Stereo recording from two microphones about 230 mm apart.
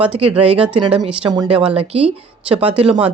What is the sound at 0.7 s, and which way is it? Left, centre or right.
Speech, right.